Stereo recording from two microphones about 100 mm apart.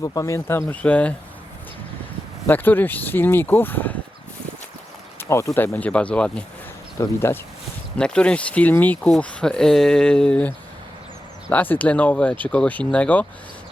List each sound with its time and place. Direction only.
0.0 s speech: 35° left (ahead or behind); by 1.1 s 15° left (ahead or behind)
2.5 s speech: 20° left (ahead or behind)
5.3 s speech: 30° left (ahead or behind); by 6.4 s 10° left (ahead or behind)
7.0 s speech: 25° left (ahead or behind)
7.9 s speech: 10° left (ahead or behind)
11.5 s speech: 15° left (ahead or behind)